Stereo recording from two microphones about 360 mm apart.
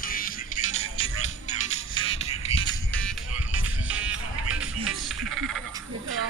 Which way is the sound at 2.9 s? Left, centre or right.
Centre.